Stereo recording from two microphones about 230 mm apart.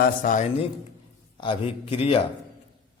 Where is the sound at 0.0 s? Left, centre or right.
Left.